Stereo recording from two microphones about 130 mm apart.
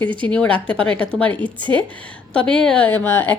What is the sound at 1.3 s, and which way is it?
Speech, 40° right (ahead or behind).